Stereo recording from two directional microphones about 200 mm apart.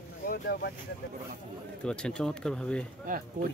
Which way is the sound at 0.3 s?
55° left (ahead or behind).